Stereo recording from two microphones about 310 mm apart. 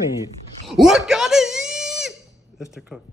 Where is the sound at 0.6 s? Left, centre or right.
Centre.